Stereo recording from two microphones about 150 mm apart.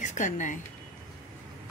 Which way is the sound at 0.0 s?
55° left (ahead or behind).